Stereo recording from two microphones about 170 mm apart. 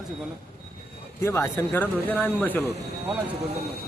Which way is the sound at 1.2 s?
15° left (ahead or behind).